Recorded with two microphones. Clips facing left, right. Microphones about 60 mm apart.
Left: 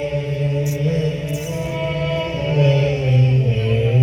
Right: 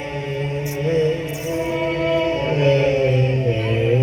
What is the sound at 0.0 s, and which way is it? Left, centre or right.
Music, right.